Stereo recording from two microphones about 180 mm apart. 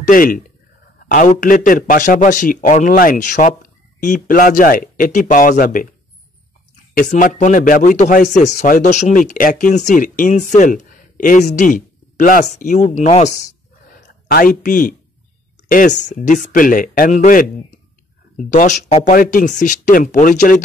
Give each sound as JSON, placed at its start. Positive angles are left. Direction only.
{"t": 0.0, "sound": "a man's voice", "side_deg": 50}
{"t": 6.9, "sound": "a man's voice", "side_deg": 45}
{"t": 14.2, "sound": "a man's voice", "side_deg": 50}
{"t": 19.1, "sound": "a man's voice", "side_deg": 50}